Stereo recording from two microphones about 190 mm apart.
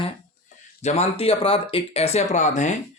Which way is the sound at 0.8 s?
35° left (ahead or behind).